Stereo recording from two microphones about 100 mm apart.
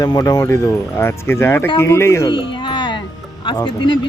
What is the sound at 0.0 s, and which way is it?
Speech, 40° left (ahead or behind).